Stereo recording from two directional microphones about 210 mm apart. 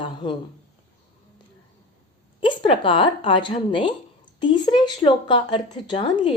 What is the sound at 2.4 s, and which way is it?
A woman's voice, 25° left (ahead or behind).